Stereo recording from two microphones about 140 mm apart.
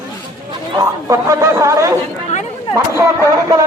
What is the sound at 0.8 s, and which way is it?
A man's voice, 25° right (ahead or behind).